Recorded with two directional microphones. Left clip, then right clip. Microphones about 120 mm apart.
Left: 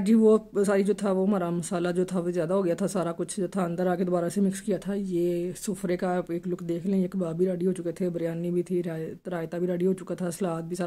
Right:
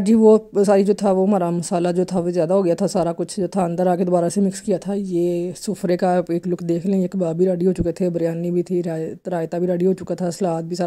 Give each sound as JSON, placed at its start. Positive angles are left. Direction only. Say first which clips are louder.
{"t": 0.0, "sound": "speech", "louder": "right 8 dB", "side_deg": -45}
{"t": 4.4, "sound": "speech", "louder": "right 7 dB", "side_deg": -35}
{"t": 5.9, "sound": "speech", "louder": "right 10 dB", "side_deg": -55}